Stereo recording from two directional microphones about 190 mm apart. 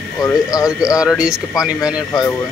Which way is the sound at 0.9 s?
5° right (ahead or behind).